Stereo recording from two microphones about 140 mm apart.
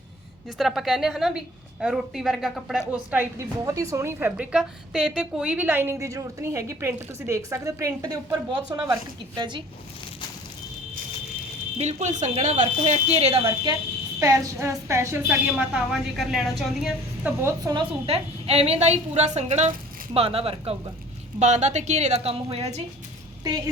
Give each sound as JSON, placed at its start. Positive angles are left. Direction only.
{"t": 0.6, "sound": "a woman's voice", "side_deg": 0}
{"t": 11.8, "sound": "speech", "side_deg": -55}
{"t": 14.2, "sound": "a woman's voice", "side_deg": -25}
{"t": 15.3, "sound": "a woman's voice", "side_deg": -5}
{"t": 17.4, "sound": "a woman's voice", "side_deg": -25}
{"t": 18.0, "sound": "speech", "side_deg": -45}
{"t": 20.1, "sound": "speech", "side_deg": -45}
{"t": 21.3, "sound": "speech", "side_deg": -55}
{"t": 23.4, "sound": "speech", "side_deg": -30}